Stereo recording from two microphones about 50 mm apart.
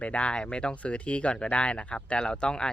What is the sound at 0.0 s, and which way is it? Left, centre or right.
Speech, left.